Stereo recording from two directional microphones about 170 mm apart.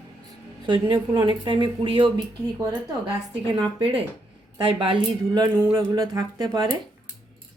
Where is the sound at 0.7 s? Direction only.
30° right (ahead or behind).